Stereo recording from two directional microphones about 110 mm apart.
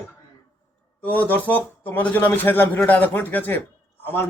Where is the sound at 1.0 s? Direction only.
15° left (ahead or behind).